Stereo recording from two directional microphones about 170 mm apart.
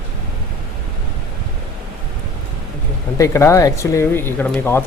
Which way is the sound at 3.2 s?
15° left (ahead or behind).